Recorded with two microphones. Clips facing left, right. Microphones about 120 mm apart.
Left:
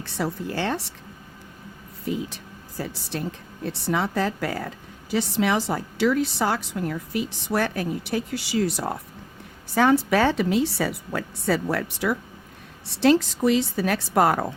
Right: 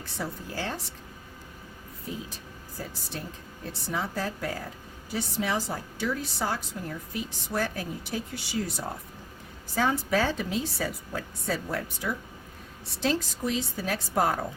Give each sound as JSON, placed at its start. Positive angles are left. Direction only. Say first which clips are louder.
{"t": 0.0, "sound": "a woman's voice", "louder": "left 7 dB", "side_deg": 75}
{"t": 2.0, "sound": "a woman's voice", "louder": "left 9 dB", "side_deg": 70}